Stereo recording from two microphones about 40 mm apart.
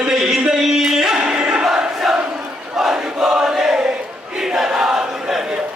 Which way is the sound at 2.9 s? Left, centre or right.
Right.